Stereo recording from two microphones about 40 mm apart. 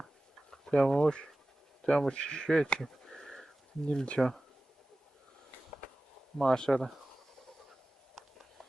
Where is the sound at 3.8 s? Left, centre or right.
Left.